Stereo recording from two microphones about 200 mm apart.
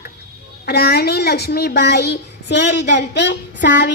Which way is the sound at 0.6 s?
55° left (ahead or behind).